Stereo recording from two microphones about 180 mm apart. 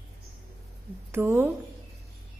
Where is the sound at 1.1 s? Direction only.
10° right (ahead or behind).